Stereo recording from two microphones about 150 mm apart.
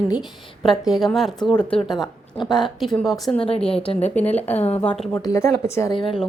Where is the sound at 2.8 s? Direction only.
Centre (ahead or behind).